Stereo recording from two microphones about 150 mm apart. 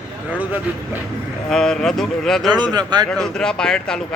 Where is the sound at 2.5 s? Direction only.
30° right (ahead or behind).